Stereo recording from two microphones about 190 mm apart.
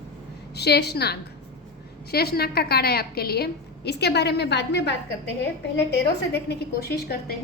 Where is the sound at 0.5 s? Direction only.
60° left (ahead or behind).